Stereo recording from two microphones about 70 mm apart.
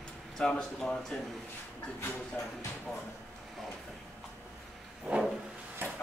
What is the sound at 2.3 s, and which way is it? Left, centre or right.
Speech, centre.